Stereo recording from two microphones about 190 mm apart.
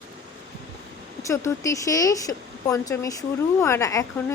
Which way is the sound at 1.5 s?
15° left (ahead or behind).